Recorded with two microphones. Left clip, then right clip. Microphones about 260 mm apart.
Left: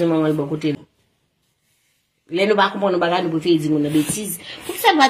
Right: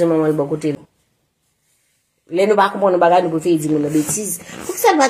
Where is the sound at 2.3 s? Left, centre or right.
Left.